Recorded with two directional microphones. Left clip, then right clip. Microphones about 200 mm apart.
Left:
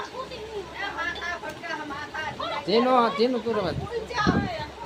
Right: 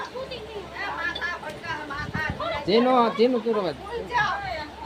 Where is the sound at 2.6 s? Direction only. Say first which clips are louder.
Right 1 dB; 5° right (ahead or behind).